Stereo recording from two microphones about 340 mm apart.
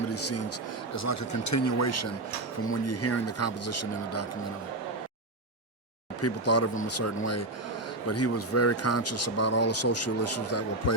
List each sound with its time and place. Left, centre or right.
0.1 s speech: left
6.2 s speech: left